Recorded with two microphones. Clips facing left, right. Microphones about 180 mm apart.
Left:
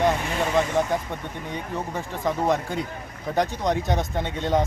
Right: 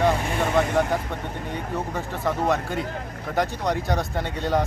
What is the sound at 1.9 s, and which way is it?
Speech, 15° left (ahead or behind).